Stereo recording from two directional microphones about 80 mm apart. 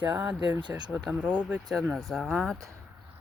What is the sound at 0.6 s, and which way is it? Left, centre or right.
Speech, right.